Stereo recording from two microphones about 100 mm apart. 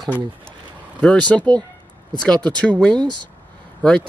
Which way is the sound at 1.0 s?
10° left (ahead or behind).